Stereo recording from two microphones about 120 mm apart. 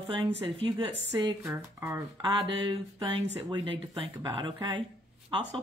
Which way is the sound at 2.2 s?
40° right (ahead or behind).